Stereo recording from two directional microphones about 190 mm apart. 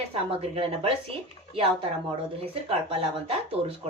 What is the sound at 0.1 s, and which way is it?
Speech, 30° right (ahead or behind).